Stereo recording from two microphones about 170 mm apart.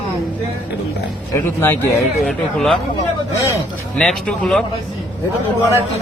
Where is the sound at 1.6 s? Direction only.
10° left (ahead or behind).